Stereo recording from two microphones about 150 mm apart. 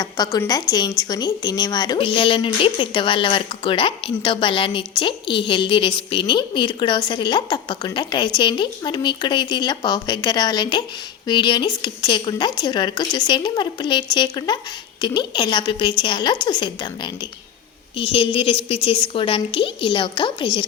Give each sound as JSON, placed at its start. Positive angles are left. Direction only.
{"t": 0.0, "sound": "a woman's voice", "side_deg": 25}